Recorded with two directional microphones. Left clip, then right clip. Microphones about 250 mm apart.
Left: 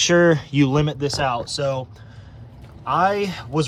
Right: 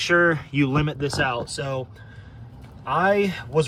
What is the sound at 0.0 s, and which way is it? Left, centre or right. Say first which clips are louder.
Speech: left 3 dB; centre.